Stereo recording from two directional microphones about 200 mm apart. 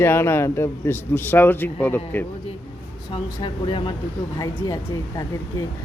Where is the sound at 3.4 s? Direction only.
25° left (ahead or behind).